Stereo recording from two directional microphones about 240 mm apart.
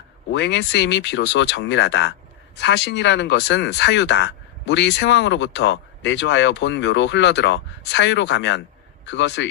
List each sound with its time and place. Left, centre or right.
0.3 s speech: left